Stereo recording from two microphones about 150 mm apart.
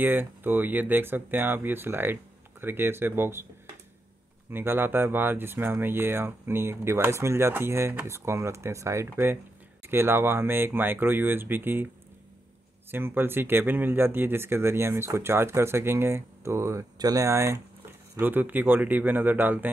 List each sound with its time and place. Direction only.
0.0 s speech: 15° right (ahead or behind)
4.5 s speech: 15° right (ahead or behind)
12.9 s speech: 15° right (ahead or behind)